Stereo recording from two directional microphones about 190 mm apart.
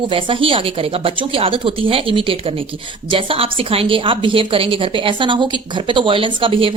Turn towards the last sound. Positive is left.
turn(degrees=-30)  # may be behind; listen again after turning